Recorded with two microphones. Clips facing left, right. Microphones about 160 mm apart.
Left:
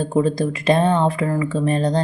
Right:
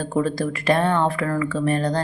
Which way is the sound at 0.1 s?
20° left (ahead or behind).